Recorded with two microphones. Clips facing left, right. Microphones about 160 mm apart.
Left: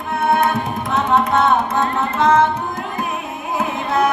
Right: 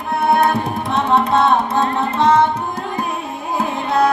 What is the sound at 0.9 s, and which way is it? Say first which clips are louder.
Carnatic music: right 1 dB; 30° right (ahead or behind).